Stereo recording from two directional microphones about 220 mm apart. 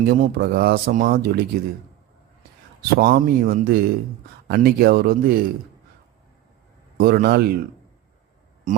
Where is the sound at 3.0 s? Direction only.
45° right (ahead or behind).